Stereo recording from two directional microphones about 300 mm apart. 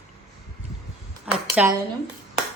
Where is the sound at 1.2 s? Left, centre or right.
Centre.